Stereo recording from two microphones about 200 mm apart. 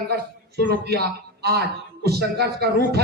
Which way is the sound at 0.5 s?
50° right (ahead or behind).